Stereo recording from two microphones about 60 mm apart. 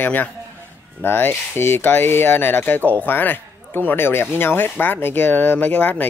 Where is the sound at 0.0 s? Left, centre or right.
Left.